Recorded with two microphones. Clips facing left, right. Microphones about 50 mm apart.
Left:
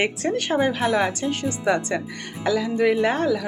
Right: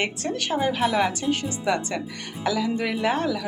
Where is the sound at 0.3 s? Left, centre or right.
Centre.